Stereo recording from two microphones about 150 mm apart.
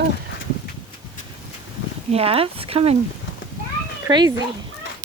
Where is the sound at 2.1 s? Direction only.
40° right (ahead or behind).